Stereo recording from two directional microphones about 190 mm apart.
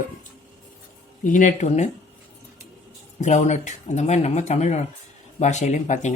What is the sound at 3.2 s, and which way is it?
Speech, 40° left (ahead or behind).